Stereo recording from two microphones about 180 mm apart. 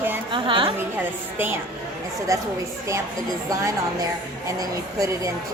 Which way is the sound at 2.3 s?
15° right (ahead or behind).